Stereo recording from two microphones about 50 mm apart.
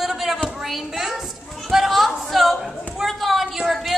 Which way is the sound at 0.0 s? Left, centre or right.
Centre.